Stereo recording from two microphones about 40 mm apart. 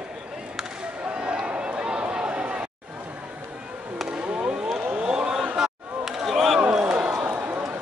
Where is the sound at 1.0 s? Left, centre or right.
Right.